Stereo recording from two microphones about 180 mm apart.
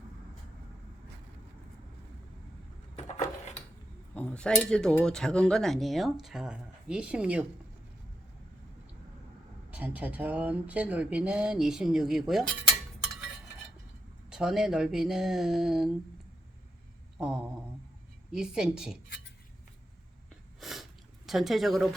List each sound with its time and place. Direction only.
2.9 s a sound: 40° left (ahead or behind)
4.1 s speech: 10° left (ahead or behind)
9.6 s speech: 10° right (ahead or behind)
14.3 s speech: 5° right (ahead or behind)
17.2 s speech: 5° right (ahead or behind)
20.6 s a sound: centre (ahead or behind)
21.2 s speech: centre (ahead or behind)